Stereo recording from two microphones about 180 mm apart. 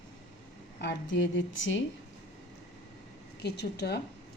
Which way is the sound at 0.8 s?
80° left.